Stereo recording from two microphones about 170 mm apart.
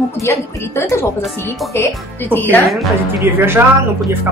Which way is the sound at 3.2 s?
15° right (ahead or behind).